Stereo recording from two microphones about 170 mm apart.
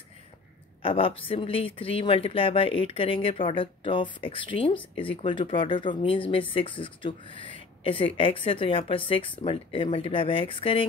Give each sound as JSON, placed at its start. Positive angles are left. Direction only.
{"t": 0.8, "sound": "speech", "side_deg": 30}